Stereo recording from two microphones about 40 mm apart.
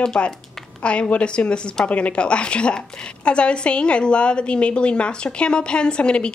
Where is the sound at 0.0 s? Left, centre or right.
Left.